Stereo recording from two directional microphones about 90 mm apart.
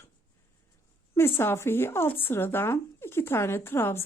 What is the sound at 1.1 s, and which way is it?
A woman's voice, 25° left (ahead or behind).